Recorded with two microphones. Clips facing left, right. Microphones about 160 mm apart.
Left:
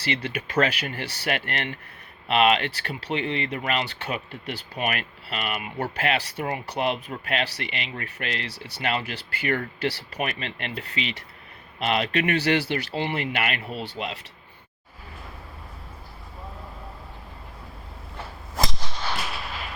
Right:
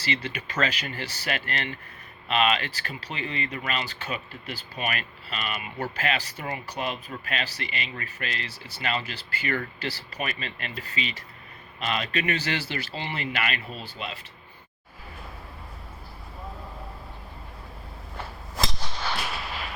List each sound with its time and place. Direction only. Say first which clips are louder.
0.0 s speech: left 3 dB; 60° left (ahead or behind)